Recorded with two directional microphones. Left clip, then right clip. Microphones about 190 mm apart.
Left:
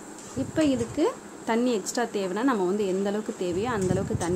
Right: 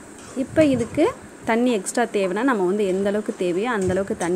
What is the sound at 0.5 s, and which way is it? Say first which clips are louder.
Speech: right 7 dB; 15° right (ahead or behind).